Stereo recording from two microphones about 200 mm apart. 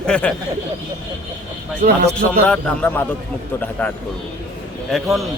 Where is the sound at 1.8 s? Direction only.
45° right (ahead or behind).